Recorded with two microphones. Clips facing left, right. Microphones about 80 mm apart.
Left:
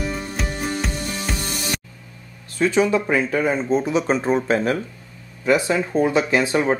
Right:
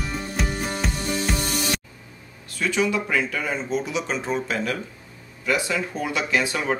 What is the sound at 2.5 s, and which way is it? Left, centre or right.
Speech, left.